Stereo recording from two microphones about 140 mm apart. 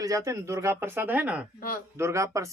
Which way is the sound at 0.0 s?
25° right (ahead or behind).